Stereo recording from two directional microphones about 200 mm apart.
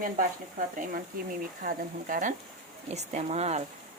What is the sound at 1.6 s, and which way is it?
Speech, 45° right (ahead or behind).